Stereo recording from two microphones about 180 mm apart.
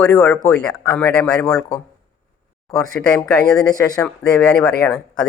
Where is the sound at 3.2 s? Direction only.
20° left (ahead or behind).